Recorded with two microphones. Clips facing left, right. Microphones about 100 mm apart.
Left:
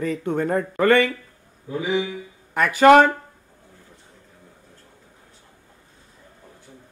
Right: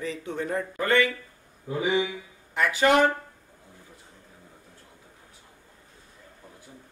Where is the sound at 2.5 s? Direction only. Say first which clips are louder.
Left 8 dB; 55° left (ahead or behind).